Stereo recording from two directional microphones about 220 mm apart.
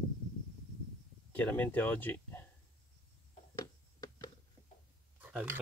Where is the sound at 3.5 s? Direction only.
15° left (ahead or behind).